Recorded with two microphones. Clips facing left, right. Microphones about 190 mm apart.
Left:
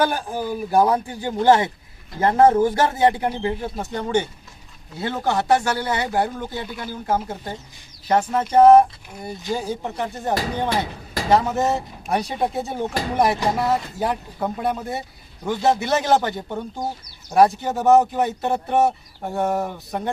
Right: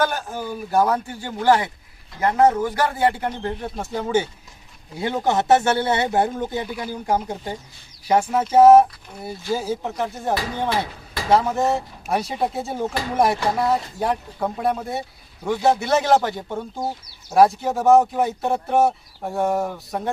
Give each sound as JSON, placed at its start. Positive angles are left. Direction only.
{"t": 0.0, "sound": "speech", "side_deg": 15}
{"t": 4.9, "sound": "speech", "side_deg": -15}